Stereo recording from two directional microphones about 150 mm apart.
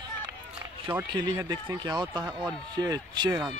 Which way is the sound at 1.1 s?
25° right (ahead or behind).